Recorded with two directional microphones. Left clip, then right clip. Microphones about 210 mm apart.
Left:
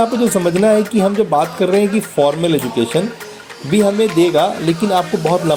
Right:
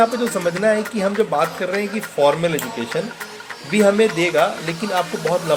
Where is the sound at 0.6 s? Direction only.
25° left (ahead or behind).